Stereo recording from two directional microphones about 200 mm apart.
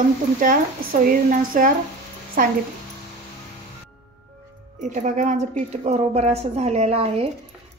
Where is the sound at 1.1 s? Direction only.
45° right (ahead or behind).